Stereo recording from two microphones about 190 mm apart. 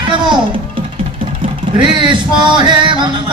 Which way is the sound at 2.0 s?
25° right (ahead or behind).